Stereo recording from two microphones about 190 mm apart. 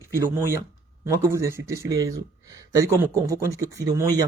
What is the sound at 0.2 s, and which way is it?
Speech, 15° right (ahead or behind).